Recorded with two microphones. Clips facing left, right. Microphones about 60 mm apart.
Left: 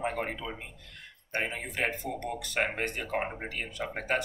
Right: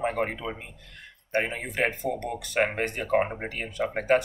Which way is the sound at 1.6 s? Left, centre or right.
Right.